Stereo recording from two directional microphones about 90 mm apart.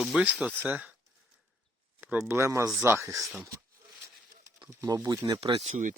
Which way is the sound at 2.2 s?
30° right (ahead or behind).